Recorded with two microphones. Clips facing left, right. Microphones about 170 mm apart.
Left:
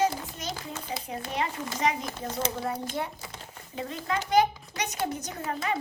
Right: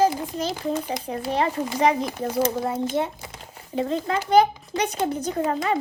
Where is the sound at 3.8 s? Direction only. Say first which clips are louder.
Right 7 dB; 30° right (ahead or behind).